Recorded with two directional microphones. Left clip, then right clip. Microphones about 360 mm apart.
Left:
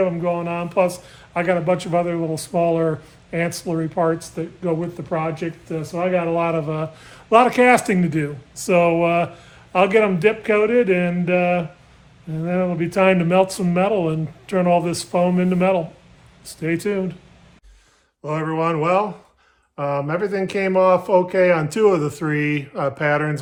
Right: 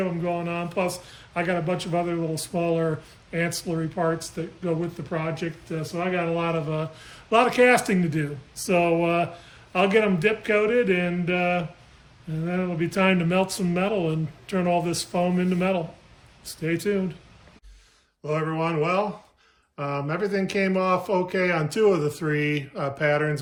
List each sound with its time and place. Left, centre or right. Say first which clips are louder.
0.0 s speech: left 7 dB; centre
18.3 s speech: left 5 dB; centre